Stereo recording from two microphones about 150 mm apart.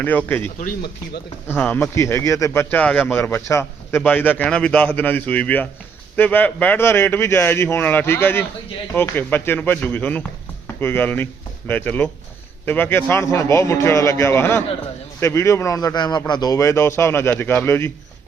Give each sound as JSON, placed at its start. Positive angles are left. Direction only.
{"t": 0.0, "sound": "speech", "side_deg": 10}